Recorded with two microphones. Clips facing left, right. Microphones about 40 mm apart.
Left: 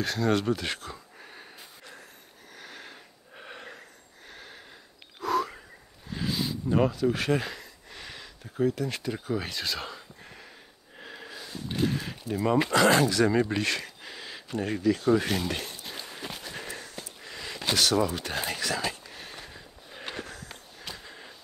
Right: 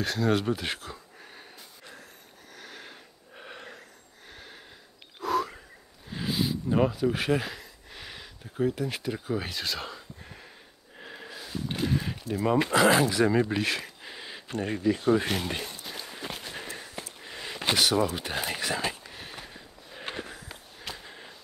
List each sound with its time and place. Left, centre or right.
0.0 s speech: centre
2.5 s wheeze: centre
4.3 s sniff: centre
5.2 s wild animals: centre
6.0 s a sound: centre
6.9 s speech: centre
11.0 s snort: centre
11.8 s a sound: centre
12.6 s speech: centre
15.8 s walk: centre
16.5 s a sound: centre
17.9 s speech: centre
19.0 s a sound: centre